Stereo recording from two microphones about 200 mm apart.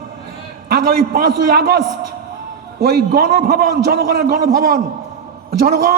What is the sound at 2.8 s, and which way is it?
A man's voice, 50° right (ahead or behind).